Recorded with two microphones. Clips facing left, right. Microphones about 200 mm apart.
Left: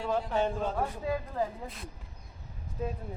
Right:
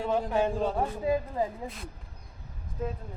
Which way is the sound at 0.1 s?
10° right (ahead or behind).